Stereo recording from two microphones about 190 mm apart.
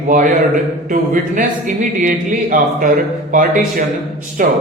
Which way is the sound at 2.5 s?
45° right (ahead or behind).